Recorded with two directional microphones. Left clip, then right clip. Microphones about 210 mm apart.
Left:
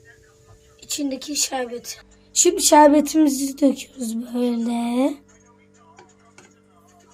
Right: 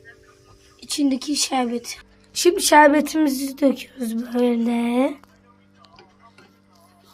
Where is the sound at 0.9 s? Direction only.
25° right (ahead or behind).